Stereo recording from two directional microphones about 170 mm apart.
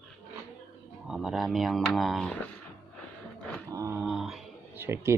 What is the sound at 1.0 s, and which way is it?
Speech, centre (ahead or behind).